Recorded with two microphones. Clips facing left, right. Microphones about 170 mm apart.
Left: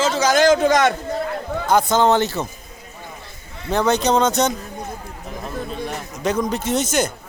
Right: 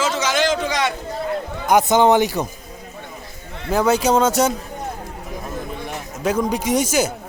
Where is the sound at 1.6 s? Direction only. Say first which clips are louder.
Right 2 dB; 15° right (ahead or behind).